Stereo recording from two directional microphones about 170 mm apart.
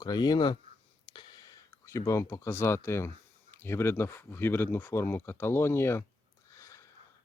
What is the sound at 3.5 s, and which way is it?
Speech, 15° left (ahead or behind).